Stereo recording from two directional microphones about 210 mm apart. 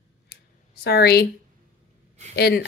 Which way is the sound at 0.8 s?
50° left (ahead or behind).